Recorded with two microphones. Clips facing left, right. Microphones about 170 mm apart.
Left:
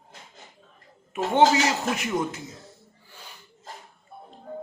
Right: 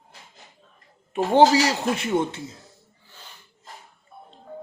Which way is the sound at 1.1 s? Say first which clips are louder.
Right 3 dB; 35° right (ahead or behind).